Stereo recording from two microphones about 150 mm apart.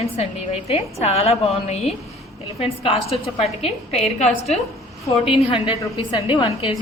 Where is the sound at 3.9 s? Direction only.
45° left (ahead or behind).